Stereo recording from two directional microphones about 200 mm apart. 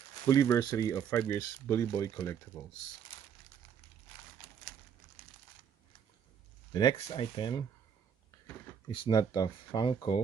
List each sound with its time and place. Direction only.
0.3 s speech: 15° left (ahead or behind)
6.7 s speech: 20° left (ahead or behind)
8.8 s speech: 25° left (ahead or behind)